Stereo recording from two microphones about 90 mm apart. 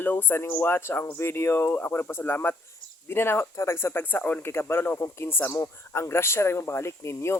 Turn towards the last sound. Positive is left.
turn(degrees=30)  # may be behind; listen again after turning